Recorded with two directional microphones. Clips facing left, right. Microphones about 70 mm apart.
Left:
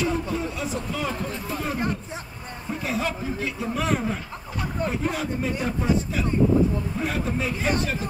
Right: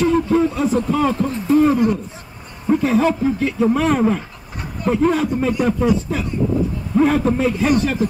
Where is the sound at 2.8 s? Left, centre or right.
Right.